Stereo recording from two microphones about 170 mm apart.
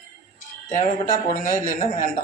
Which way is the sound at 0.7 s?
50° left (ahead or behind).